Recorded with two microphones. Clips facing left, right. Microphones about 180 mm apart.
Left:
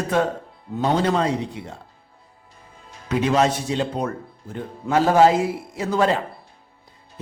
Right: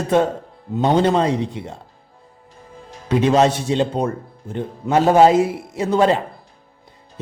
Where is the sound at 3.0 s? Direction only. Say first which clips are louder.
Right 4 dB; 30° right (ahead or behind).